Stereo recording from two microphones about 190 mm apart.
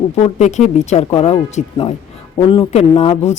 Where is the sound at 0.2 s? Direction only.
35° left (ahead or behind).